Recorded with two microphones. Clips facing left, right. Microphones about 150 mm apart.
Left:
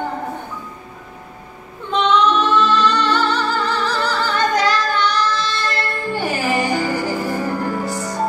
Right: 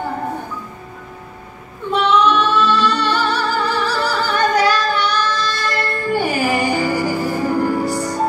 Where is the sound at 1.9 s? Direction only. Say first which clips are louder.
Right 1 dB; 10° right (ahead or behind).